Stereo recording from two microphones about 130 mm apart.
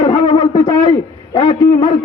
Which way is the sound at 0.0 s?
35° left (ahead or behind).